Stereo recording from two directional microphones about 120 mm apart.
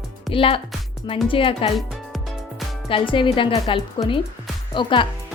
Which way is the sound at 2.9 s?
45° left (ahead or behind).